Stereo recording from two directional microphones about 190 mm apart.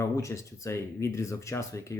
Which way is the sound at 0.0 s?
15° left (ahead or behind).